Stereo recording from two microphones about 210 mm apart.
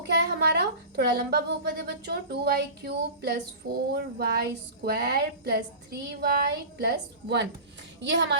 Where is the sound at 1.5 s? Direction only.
50° right (ahead or behind).